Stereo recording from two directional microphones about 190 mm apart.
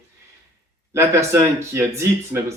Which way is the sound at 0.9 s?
15° right (ahead or behind).